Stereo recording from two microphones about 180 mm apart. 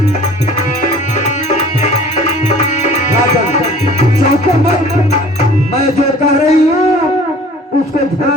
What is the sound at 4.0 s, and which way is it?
Music, 40° left (ahead or behind).